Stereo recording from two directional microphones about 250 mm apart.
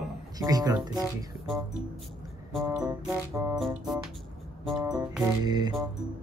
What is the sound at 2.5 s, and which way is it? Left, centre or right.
Music, centre.